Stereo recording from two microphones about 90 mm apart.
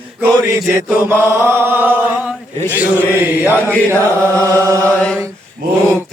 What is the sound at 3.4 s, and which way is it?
Chant, 25° left (ahead or behind).